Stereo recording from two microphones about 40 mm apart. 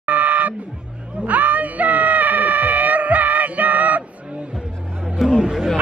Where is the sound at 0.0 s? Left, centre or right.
Right.